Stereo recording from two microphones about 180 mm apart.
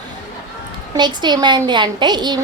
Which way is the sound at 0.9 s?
25° right (ahead or behind).